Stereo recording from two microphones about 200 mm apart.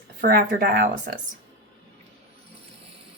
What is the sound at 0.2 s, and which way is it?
Speech, 50° right (ahead or behind).